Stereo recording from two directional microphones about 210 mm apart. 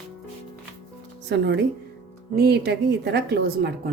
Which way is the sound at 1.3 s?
55° right (ahead or behind).